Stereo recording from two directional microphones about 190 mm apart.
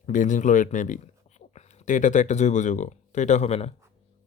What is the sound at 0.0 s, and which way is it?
Speech, 40° left (ahead or behind).